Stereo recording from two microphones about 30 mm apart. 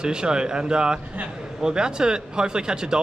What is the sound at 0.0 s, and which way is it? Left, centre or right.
Speech, right.